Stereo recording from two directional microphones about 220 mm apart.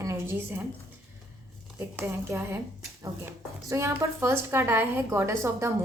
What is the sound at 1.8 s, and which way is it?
Speech, 10° right (ahead or behind).